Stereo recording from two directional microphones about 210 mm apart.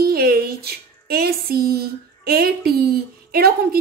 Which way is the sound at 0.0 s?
45° right (ahead or behind).